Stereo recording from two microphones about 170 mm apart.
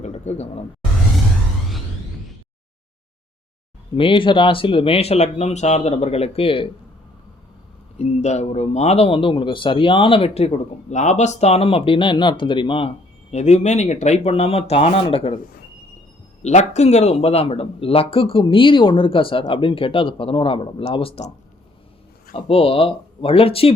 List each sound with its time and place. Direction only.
0.0 s a sound: 40° left (ahead or behind)
3.9 s a man's voice: 30° left (ahead or behind)
7.9 s a man's voice: 40° left (ahead or behind)
13.3 s a man's voice: 40° left (ahead or behind)
16.4 s a man's voice: 40° left (ahead or behind)
22.4 s a man's voice: 35° left (ahead or behind)